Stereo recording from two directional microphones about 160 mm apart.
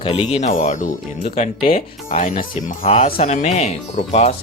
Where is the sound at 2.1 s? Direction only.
55° left (ahead or behind).